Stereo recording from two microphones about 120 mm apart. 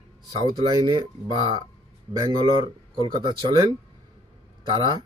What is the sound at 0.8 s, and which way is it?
Speech, 40° right (ahead or behind).